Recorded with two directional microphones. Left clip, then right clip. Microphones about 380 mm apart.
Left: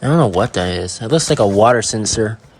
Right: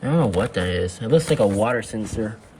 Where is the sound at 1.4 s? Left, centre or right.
Left.